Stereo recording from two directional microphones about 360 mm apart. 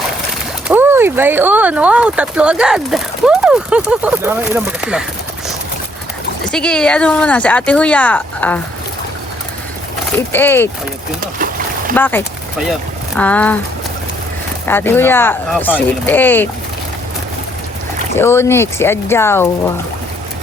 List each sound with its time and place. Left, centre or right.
0.7 s speech: centre
6.5 s speech: centre
10.3 s speech: centre
11.2 s boat: right
11.9 s speech: centre
14.7 s speech: centre
18.2 s speech: centre